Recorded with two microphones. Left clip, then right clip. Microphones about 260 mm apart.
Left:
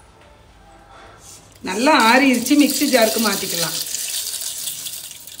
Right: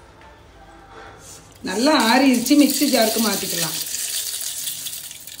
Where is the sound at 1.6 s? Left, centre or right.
Left.